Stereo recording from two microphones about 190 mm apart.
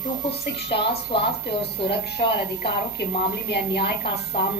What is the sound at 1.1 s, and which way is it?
Speech, 25° left (ahead or behind).